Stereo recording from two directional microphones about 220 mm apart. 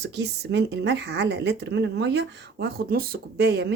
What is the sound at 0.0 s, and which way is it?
A woman's voice, 50° right (ahead or behind).